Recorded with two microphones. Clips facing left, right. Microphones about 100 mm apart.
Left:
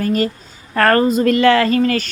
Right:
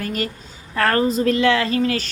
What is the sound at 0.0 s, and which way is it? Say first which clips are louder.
Speech: left 8 dB; 35° left (ahead or behind).